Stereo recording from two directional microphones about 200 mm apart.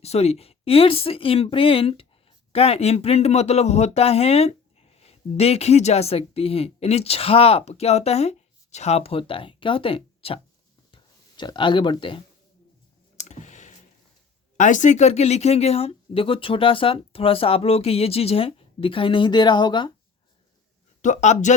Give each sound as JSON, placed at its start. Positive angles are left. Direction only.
{"t": 0.0, "sound": "speech", "side_deg": 30}
{"t": 13.1, "sound": "clicking", "side_deg": 35}
{"t": 14.5, "sound": "speech", "side_deg": 40}
{"t": 21.0, "sound": "speech", "side_deg": 35}